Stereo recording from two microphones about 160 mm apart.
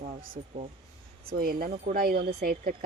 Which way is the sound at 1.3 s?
65° right (ahead or behind).